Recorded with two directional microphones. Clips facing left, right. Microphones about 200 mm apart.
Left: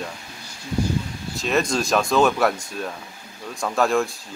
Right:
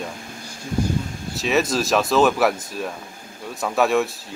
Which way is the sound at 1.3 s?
5° right (ahead or behind).